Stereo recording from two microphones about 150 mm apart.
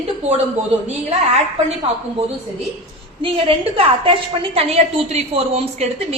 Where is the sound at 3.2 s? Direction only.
35° right (ahead or behind).